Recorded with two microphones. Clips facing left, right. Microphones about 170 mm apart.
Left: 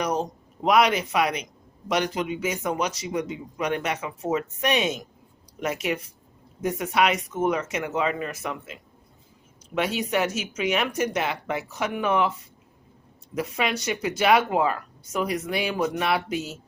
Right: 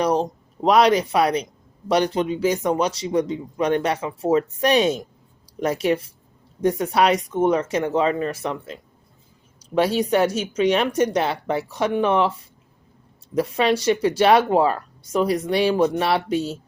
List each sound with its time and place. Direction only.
0.0 s speech: 30° right (ahead or behind)
13.3 s speech: 30° right (ahead or behind)